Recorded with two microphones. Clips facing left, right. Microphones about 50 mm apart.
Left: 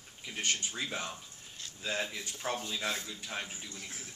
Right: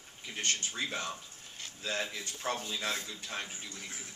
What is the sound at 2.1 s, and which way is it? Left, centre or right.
Speech, centre.